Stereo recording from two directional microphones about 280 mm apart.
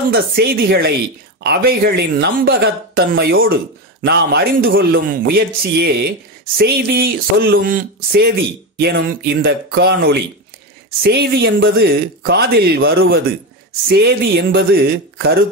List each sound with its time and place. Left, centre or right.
0.1 s speech: right